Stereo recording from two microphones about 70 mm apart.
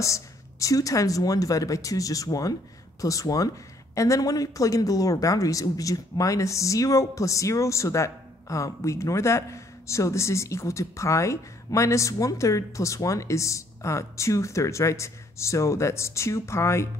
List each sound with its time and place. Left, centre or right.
0.0 s speech: left